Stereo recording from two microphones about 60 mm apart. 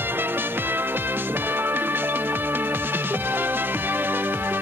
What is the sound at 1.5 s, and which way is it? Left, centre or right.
Music, right.